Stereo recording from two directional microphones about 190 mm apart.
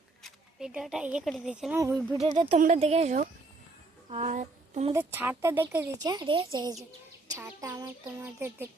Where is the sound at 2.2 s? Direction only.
30° right (ahead or behind).